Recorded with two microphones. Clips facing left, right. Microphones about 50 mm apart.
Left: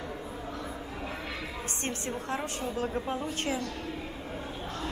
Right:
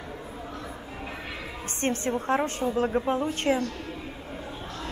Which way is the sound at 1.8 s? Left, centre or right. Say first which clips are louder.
Right 10 dB; right.